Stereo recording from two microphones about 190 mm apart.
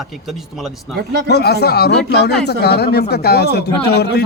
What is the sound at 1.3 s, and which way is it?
Speech, 55° left (ahead or behind).